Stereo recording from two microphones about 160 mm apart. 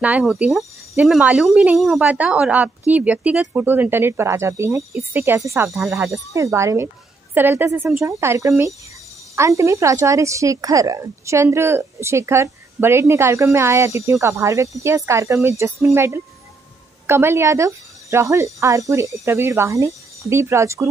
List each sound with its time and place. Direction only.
0.0 s a woman's voice: 10° right (ahead or behind)